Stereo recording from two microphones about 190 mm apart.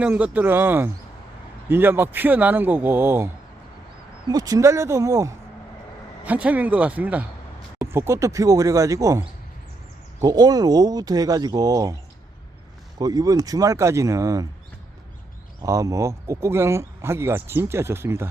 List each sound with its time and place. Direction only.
0.0 s speech: 10° right (ahead or behind)
4.3 s speech: 20° right (ahead or behind)
13.0 s speech: 20° right (ahead or behind)
15.6 s speech: 15° right (ahead or behind)